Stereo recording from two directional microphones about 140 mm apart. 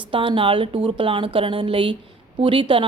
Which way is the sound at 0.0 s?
35° right (ahead or behind).